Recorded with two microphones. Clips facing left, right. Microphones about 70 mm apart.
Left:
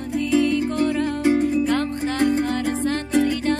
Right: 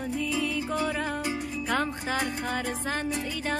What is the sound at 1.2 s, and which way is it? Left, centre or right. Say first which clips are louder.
Music: left 13 dB; left.